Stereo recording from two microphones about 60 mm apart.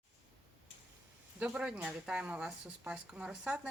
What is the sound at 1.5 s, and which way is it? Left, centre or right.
A woman's voice, centre.